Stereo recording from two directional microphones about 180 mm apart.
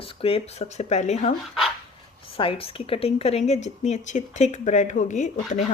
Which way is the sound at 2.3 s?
30° left (ahead or behind).